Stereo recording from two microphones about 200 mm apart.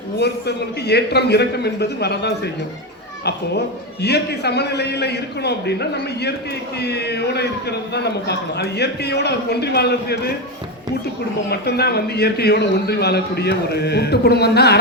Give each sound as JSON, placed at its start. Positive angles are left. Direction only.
{"t": 0.2, "sound": "a man's voice", "side_deg": 55}
{"t": 4.0, "sound": "a man's voice", "side_deg": 55}
{"t": 11.4, "sound": "a man's voice", "side_deg": 55}